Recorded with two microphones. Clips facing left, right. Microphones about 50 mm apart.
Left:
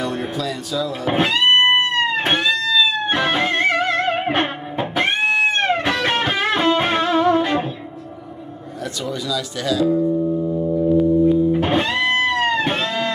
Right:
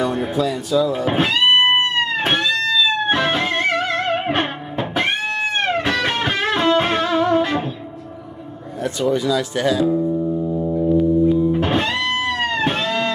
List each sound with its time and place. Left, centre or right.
0.4 s speech: centre
1.0 s music: centre
9.0 s speech: right
9.9 s music: centre